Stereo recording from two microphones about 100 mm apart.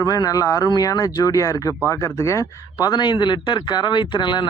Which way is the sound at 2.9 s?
50° left (ahead or behind).